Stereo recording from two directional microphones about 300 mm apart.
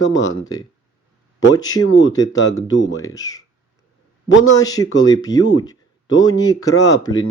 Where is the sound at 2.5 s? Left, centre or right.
Left.